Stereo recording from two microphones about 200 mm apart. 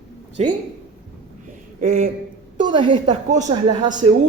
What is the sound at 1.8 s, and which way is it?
Speech, 35° right (ahead or behind).